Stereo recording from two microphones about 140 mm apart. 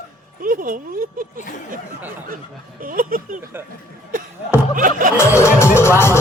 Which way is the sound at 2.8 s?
85° right.